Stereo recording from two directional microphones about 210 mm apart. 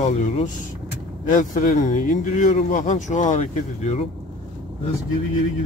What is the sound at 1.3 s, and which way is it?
Speech, 40° left (ahead or behind).